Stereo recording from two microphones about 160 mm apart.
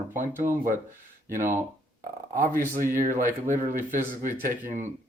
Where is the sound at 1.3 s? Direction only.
55° right (ahead or behind).